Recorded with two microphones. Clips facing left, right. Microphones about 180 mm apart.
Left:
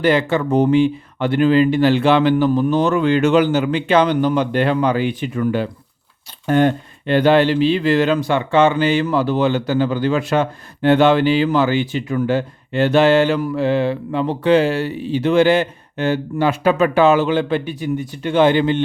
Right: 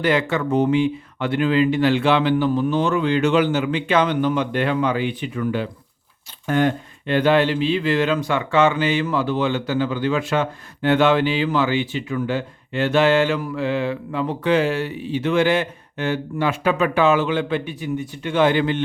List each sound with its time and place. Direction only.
0.0 s speech: 30° left (ahead or behind)